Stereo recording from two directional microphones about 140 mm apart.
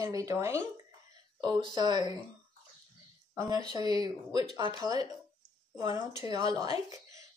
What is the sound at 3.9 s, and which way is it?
Speech, 40° left (ahead or behind).